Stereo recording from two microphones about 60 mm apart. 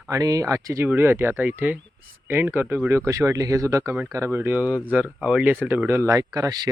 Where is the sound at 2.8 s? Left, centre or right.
Right.